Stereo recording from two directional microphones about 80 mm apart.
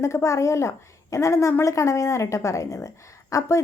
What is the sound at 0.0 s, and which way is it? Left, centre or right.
Speech, left.